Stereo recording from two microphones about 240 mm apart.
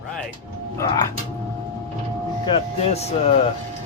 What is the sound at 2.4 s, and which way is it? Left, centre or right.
Speech, left.